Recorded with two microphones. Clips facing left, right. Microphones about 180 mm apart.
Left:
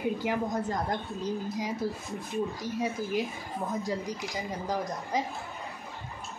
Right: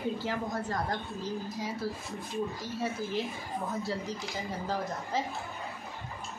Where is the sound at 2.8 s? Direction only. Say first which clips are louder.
Left 2 dB; 15° left (ahead or behind).